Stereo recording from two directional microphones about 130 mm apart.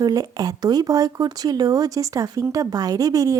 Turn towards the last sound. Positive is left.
turn(degrees=-25)  # may be behind; listen again after turning